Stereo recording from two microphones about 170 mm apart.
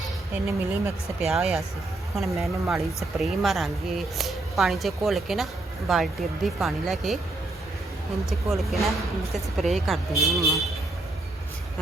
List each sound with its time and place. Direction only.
0.4 s speech: 15° right (ahead or behind)
1.3 s speech: centre (ahead or behind)
8.3 s speech: centre (ahead or behind)